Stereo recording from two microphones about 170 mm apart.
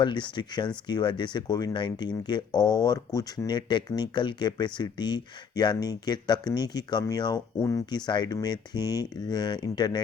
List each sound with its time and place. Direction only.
0.0 s speech: 25° left (ahead or behind)